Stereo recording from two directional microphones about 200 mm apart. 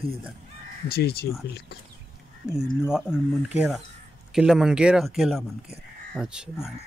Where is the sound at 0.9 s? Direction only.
50° left (ahead or behind).